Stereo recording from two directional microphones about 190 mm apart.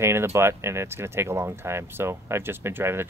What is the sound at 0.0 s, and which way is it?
Speech, 15° right (ahead or behind).